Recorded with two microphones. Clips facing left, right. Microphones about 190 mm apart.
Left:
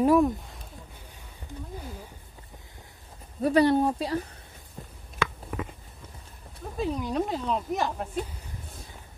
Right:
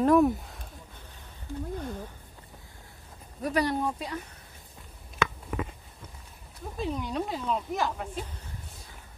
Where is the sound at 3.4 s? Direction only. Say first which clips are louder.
Left 7 dB; 30° left (ahead or behind).